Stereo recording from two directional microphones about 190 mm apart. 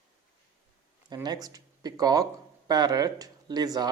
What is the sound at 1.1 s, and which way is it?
Speech, 20° right (ahead or behind).